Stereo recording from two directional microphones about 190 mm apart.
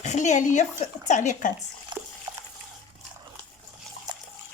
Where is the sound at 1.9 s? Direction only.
25° right (ahead or behind).